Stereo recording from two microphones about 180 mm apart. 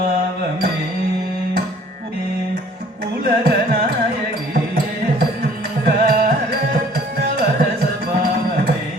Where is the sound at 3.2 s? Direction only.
60° right (ahead or behind).